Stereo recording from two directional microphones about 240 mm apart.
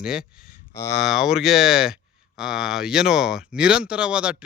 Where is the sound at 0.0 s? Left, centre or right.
Centre.